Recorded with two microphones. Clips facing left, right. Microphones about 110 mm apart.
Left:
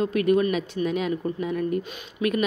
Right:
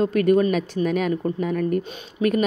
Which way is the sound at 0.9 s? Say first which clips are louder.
Right 3 dB; 50° right (ahead or behind).